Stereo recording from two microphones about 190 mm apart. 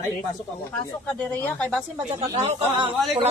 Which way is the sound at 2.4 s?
30° right (ahead or behind).